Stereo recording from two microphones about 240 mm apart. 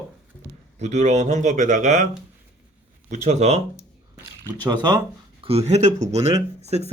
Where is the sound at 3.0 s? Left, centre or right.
Right.